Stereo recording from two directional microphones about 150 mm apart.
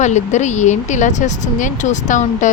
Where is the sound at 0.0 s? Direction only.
50° left (ahead or behind).